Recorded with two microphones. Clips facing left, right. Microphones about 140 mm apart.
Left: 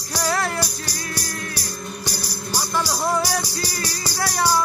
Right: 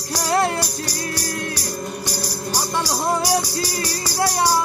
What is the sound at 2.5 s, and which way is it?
Music, 15° right (ahead or behind).